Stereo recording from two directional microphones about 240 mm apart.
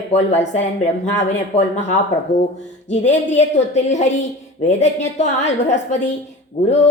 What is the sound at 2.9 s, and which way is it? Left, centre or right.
A woman's voice, left.